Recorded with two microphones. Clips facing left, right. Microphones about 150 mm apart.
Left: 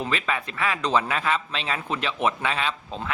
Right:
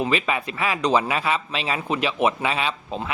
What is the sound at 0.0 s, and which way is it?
A man's voice, 15° right (ahead or behind).